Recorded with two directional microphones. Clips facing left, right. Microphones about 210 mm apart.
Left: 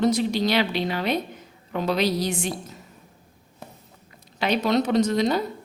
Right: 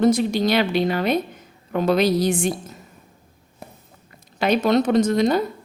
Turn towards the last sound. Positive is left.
turn(degrees=-50)  # may be behind; listen again after turning